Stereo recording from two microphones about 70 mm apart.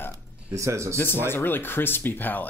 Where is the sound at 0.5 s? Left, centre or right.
Right.